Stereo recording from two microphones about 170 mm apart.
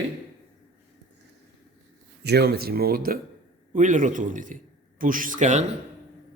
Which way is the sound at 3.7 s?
50° right (ahead or behind).